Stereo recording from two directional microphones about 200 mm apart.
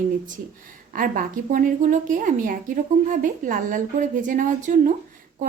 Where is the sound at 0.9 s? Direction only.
45° right (ahead or behind).